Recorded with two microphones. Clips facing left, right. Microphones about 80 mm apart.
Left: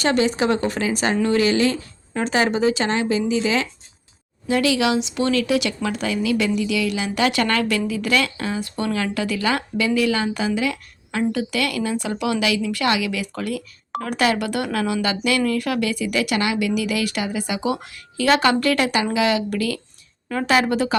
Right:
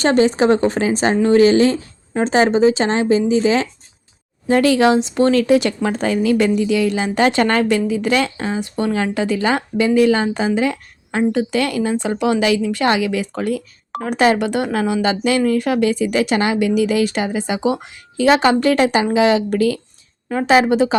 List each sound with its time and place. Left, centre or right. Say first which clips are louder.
0.0 s speech: right 5 dB; right